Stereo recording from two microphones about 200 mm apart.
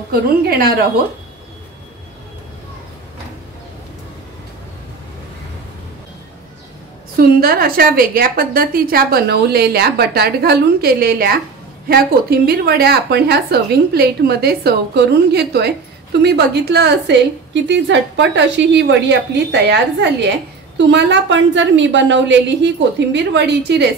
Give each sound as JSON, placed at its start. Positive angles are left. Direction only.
{"t": 0.1, "sound": "a woman's voice", "side_deg": -50}
{"t": 7.2, "sound": "a woman's voice", "side_deg": -45}